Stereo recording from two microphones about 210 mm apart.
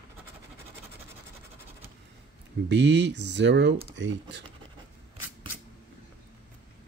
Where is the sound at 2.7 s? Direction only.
55° right (ahead or behind).